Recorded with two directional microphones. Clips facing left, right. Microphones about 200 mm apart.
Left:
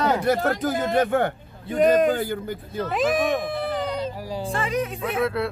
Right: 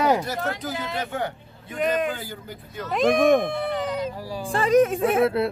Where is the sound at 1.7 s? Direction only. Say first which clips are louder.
Left 6 dB; 35° left (ahead or behind).